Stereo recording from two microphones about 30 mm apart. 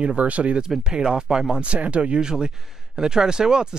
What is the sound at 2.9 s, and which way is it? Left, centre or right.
Speech, right.